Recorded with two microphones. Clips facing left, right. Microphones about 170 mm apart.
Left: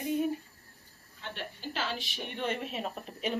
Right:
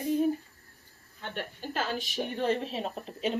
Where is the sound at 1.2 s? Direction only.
50° right (ahead or behind).